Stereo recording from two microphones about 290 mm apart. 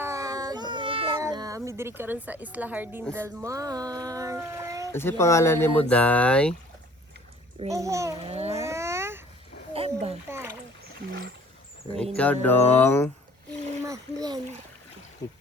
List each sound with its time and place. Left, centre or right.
0.0 s a sound: centre
3.2 s speech: centre
4.9 s speech: centre
7.6 s a child's voice: centre
8.3 s babbling: right
8.5 s babbling: centre
9.7 s a sound: centre
10.2 s splash: centre
12.1 s speech: centre
13.8 s splash: centre